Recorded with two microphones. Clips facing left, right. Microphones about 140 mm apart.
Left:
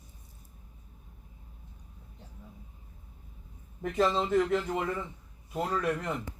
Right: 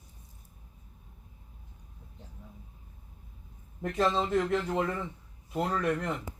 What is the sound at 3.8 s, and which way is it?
A man's voice, centre (ahead or behind).